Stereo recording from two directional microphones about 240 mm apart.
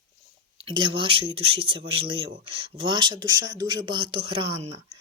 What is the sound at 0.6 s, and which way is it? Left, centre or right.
Speech, centre.